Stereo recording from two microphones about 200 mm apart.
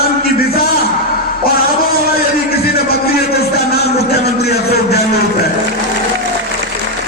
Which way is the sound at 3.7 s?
55° left (ahead or behind).